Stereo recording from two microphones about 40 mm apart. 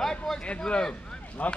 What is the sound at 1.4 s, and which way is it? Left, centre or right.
Speech, left.